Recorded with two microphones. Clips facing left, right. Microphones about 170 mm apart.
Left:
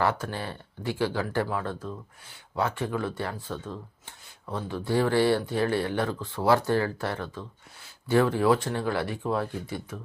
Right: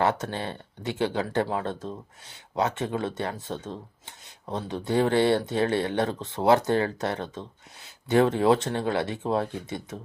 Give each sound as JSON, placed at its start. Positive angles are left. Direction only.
{"t": 0.0, "sound": "speech", "side_deg": -20}